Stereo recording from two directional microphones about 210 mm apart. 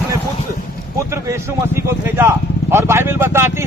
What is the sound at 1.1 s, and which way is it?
Speech, 15° right (ahead or behind).